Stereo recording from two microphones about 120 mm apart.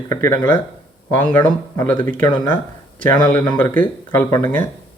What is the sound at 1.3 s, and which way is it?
Speech, 35° left (ahead or behind).